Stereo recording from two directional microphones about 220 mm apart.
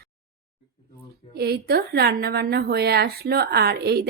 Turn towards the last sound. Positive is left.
turn(degrees=-45)  # may be behind; listen again after turning